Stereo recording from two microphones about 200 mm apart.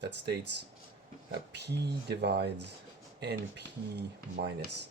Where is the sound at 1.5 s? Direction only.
55° right (ahead or behind).